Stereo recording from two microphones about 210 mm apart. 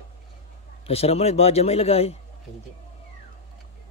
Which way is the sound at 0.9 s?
30° left (ahead or behind).